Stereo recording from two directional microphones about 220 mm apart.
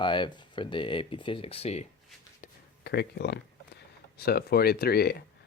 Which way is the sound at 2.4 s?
45° left (ahead or behind).